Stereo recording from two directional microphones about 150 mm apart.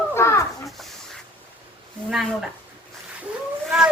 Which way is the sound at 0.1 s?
15° left (ahead or behind).